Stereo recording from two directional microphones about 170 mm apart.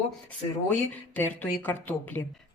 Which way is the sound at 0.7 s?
10° left (ahead or behind).